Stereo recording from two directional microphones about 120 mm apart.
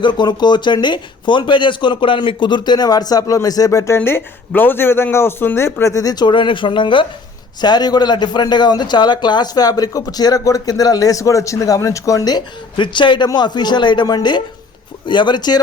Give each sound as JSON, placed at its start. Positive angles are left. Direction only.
{"t": 0.0, "sound": "speech", "side_deg": 40}